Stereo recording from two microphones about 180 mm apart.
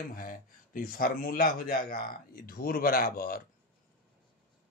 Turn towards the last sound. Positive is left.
turn(degrees=55)  # may be behind; listen again after turning